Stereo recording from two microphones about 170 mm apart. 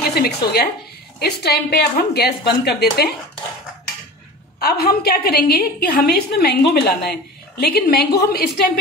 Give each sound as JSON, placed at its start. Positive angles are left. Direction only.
{"t": 0.1, "sound": "a woman's voice", "side_deg": 65}
{"t": 4.6, "sound": "a woman's voice", "side_deg": 65}